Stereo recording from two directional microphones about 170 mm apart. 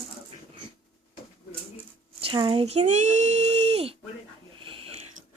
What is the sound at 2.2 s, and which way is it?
Speech, 30° right (ahead or behind).